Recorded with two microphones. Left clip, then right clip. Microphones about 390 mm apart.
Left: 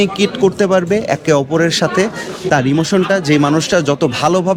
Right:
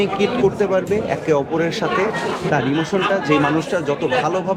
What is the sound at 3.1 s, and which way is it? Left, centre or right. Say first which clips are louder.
Speech: left 4 dB; left.